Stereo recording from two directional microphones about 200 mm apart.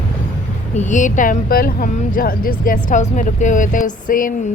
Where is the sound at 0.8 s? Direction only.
40° left (ahead or behind).